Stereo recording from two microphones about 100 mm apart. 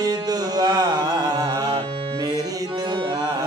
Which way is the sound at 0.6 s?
40° right (ahead or behind).